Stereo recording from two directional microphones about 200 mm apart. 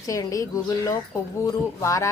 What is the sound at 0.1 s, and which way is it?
A woman's voice, 15° left (ahead or behind).